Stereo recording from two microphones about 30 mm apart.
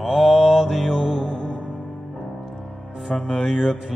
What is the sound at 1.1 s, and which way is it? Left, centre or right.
Music, centre.